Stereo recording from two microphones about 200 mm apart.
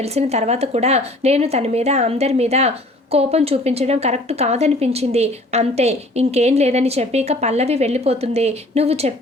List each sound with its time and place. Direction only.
0.0 s speech: 30° right (ahead or behind)